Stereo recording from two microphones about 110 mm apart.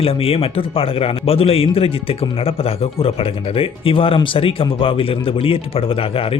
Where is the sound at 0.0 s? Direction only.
60° left (ahead or behind).